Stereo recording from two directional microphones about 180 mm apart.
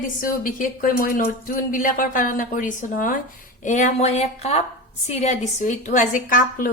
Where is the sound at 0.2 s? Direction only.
50° left (ahead or behind).